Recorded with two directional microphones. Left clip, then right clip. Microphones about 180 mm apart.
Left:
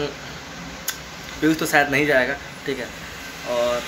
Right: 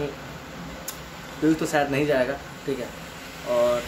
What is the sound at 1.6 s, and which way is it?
Speech, centre (ahead or behind).